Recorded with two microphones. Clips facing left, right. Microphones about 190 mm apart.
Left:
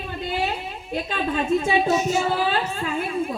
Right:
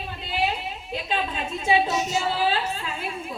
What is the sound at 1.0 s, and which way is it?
Music, 50° left (ahead or behind).